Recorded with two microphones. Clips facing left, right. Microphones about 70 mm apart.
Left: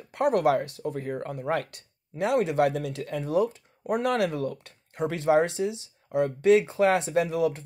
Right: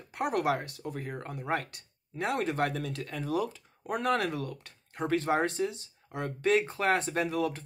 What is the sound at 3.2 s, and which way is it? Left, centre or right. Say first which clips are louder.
Speech: left 6 dB; left.